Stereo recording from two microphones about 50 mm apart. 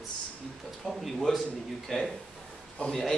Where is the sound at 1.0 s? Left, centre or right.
Centre.